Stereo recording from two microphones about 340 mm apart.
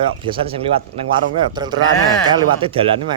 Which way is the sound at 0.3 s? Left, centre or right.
Centre.